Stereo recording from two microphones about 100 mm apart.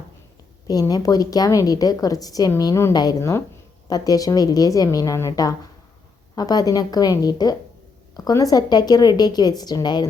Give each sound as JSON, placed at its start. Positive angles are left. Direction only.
{"t": 0.7, "sound": "a woman's voice", "side_deg": 40}
{"t": 3.2, "sound": "a woman's voice", "side_deg": 30}